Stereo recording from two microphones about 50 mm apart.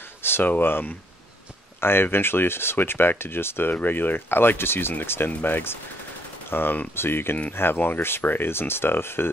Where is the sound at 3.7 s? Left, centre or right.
Left.